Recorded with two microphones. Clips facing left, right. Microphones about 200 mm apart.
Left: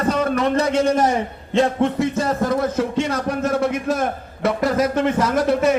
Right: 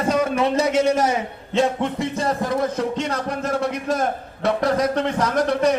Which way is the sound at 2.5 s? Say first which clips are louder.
Left 2 dB; 5° left (ahead or behind).